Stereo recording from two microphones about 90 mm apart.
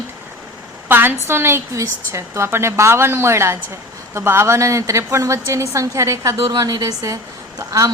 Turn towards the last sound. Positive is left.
turn(degrees=-40)  # may be behind; listen again after turning